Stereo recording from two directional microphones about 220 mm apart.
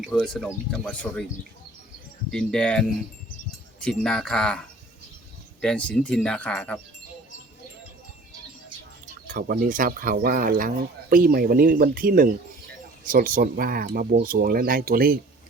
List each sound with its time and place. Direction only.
0.0 s speech: centre (ahead or behind)
2.3 s speech: 5° left (ahead or behind)
5.6 s speech: 5° left (ahead or behind)
9.3 s speech: 40° right (ahead or behind)